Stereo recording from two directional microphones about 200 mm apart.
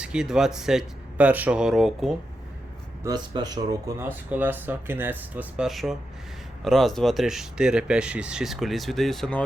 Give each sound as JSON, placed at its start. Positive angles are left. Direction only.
{"t": 0.0, "sound": "speech", "side_deg": -5}
{"t": 3.0, "sound": "speech", "side_deg": -20}